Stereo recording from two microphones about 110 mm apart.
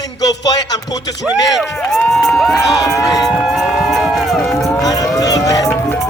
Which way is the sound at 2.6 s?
30° left (ahead or behind).